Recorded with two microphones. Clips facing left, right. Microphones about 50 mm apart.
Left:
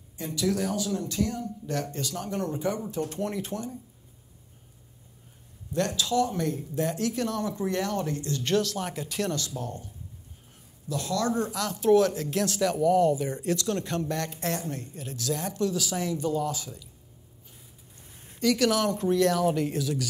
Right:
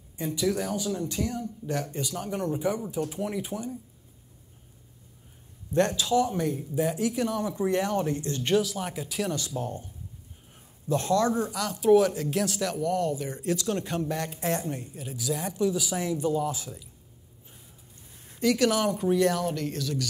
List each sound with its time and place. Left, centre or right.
0.4 s speech: centre
5.7 s speech: right
8.5 s speech: centre
9.6 s speech: right
10.9 s speech: right
11.5 s speech: centre
13.6 s speech: centre
18.4 s speech: centre
19.4 s speech: centre